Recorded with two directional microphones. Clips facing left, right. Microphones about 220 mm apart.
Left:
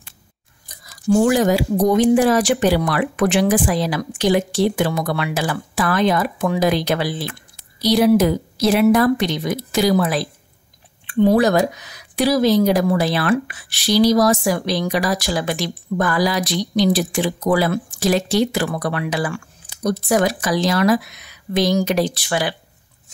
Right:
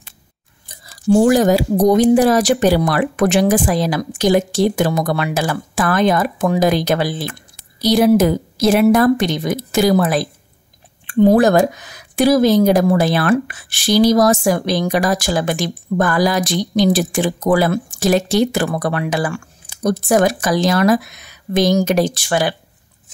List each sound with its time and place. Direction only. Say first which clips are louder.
0.7 s speech: right 3 dB; 30° right (ahead or behind); by 22.6 s 45° right (ahead or behind)